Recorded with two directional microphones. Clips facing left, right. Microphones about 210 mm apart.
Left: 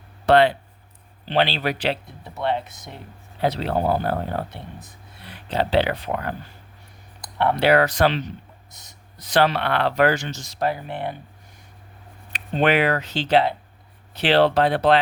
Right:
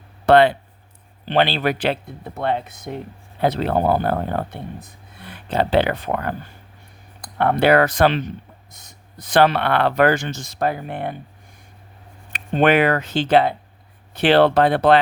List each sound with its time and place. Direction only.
0.3 s speech: 50° right (ahead or behind)
7.3 s speech: 50° right (ahead or behind)
12.3 s speech: 50° right (ahead or behind)